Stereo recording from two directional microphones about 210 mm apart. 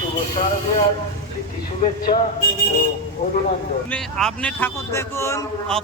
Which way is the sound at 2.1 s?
25° left (ahead or behind).